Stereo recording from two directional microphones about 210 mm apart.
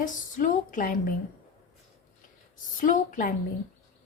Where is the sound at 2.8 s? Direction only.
40° left (ahead or behind).